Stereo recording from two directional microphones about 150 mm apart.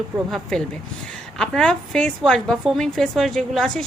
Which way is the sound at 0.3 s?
Centre (ahead or behind).